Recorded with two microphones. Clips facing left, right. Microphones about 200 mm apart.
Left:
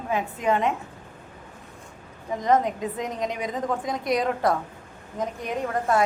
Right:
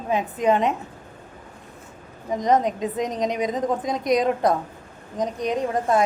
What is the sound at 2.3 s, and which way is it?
A woman's voice, 20° right (ahead or behind).